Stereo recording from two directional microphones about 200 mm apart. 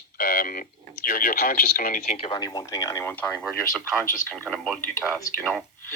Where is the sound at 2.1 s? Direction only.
30° left (ahead or behind).